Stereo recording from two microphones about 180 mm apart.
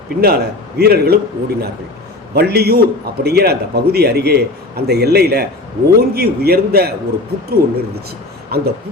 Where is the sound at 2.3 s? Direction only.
65° right (ahead or behind).